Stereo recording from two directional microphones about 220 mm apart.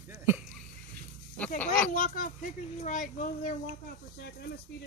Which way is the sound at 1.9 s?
35° left (ahead or behind).